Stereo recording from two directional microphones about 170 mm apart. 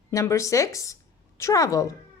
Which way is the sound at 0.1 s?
20° left (ahead or behind).